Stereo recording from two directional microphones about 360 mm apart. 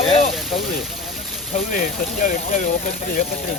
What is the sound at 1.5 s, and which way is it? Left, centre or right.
Speech, left.